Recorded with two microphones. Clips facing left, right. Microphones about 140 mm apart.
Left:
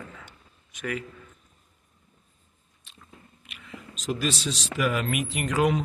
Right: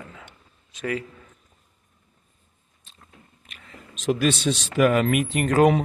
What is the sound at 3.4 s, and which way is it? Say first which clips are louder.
Whispering: left 4 dB; 45° right (ahead or behind).